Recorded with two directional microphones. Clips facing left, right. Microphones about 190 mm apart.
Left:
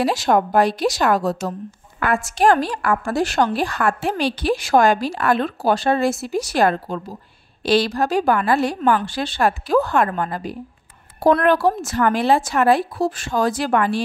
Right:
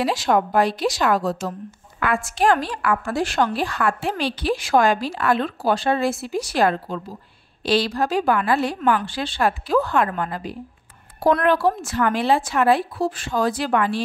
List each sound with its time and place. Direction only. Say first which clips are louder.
0.0 s a woman's voice: left 2 dB; 40° left (ahead or behind)